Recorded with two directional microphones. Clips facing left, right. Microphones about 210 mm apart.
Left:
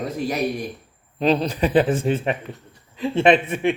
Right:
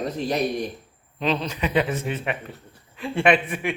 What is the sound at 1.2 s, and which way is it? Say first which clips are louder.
Speech: left 5 dB; 35° left (ahead or behind).